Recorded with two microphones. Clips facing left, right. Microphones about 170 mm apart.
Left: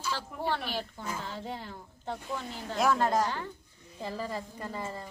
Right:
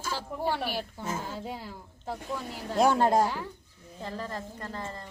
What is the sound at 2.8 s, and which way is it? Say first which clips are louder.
Speech: right 4 dB; 30° right (ahead or behind).